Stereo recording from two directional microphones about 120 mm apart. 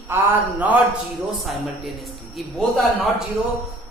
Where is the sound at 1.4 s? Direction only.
Centre (ahead or behind).